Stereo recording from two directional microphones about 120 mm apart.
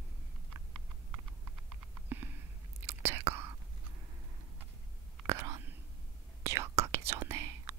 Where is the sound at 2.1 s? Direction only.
15° right (ahead or behind).